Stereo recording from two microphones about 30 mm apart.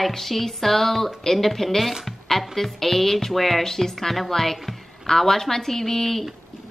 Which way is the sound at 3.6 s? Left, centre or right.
Centre.